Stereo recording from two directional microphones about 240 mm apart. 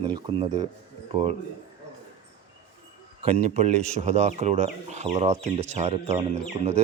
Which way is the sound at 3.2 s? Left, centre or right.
Right.